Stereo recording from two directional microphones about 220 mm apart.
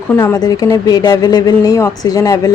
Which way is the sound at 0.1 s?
10° left (ahead or behind).